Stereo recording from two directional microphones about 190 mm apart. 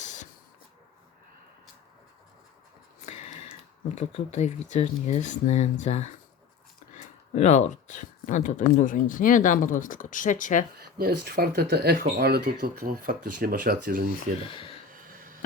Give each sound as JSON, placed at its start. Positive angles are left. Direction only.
{"t": 0.0, "sound": "spray", "side_deg": 40}
{"t": 3.8, "sound": "speech", "side_deg": 40}
{"t": 7.3, "sound": "speech", "side_deg": 35}
{"t": 10.8, "sound": "speech", "side_deg": -55}
{"t": 14.4, "sound": "speech", "side_deg": 30}
{"t": 14.9, "sound": "a sound", "side_deg": -45}